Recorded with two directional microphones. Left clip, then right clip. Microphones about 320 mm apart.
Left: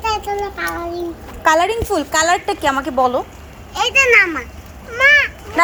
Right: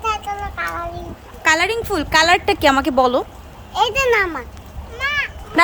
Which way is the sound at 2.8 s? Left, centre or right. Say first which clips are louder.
Even; right.